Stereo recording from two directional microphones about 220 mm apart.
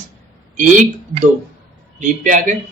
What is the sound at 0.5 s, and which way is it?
Speech, 35° right (ahead or behind).